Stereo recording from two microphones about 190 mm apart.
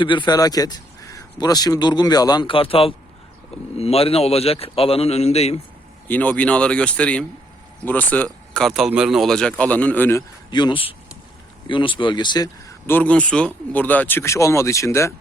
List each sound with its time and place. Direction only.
0.0 s a man's voice: 25° left (ahead or behind)
6.1 s speech: 10° left (ahead or behind)
10.5 s a man's voice: 25° left (ahead or behind)